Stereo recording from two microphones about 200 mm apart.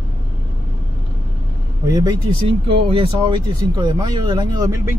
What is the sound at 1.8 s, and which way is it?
Speech, 20° right (ahead or behind).